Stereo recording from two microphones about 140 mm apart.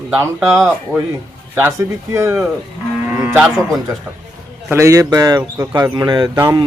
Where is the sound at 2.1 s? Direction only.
20° right (ahead or behind).